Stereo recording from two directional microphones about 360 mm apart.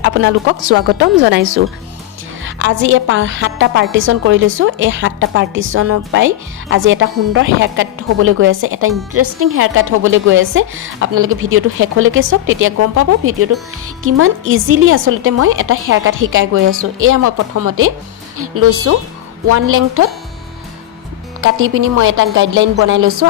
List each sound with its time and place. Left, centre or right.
0.0 s a woman's voice: right
21.4 s a woman's voice: right